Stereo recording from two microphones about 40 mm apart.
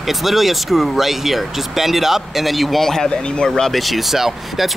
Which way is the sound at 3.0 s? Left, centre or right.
Left.